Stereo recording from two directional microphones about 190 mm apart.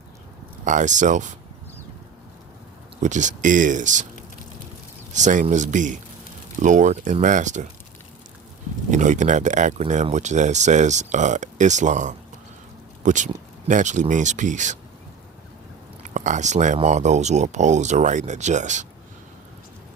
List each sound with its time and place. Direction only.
0.6 s speech: 40° right (ahead or behind)
3.0 s speech: 40° right (ahead or behind)
5.1 s speech: 40° right (ahead or behind)
8.9 s speech: 40° right (ahead or behind)
16.0 s speech: 40° right (ahead or behind)